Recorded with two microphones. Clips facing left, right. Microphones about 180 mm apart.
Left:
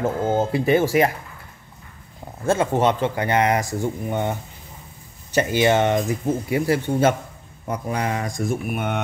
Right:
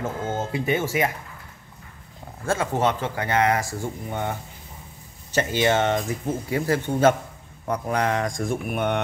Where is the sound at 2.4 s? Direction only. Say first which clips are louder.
Left 4 dB; 20° left (ahead or behind).